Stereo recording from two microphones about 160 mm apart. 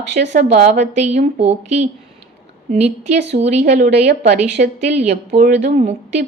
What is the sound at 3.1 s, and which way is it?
Speech, 90° right.